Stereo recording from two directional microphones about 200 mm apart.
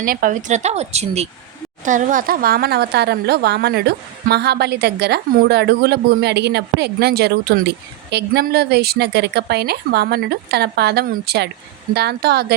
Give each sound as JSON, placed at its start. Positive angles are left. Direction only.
{"t": 0.0, "sound": "a woman's voice", "side_deg": -45}